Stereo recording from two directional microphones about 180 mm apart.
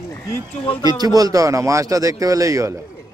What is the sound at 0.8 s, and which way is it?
Speech, 20° right (ahead or behind).